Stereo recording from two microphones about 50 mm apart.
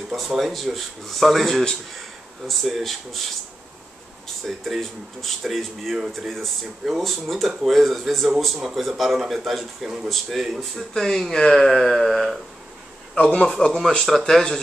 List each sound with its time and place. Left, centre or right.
0.4 s speech: centre
4.5 s speech: centre
13.1 s speech: left
13.6 s speech: centre